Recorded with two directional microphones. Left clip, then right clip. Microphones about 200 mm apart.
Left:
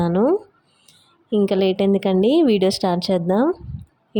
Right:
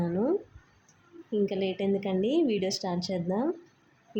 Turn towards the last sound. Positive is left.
turn(degrees=45)  # may be behind; listen again after turning